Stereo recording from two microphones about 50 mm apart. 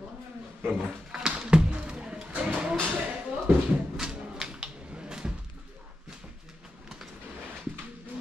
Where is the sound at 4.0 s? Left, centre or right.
Centre.